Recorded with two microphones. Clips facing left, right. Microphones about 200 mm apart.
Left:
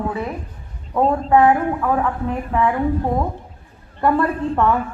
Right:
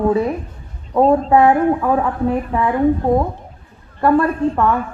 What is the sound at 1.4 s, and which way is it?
Speech, 25° right (ahead or behind).